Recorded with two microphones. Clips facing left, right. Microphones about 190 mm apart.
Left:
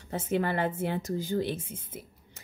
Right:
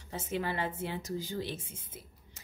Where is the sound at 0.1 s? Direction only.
55° left (ahead or behind).